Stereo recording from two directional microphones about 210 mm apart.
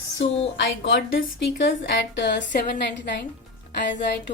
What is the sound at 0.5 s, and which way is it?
A woman's voice, 60° left (ahead or behind).